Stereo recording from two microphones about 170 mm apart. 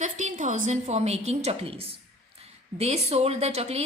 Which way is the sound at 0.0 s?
45° right (ahead or behind).